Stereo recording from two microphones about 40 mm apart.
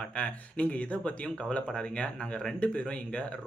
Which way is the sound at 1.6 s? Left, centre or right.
Left.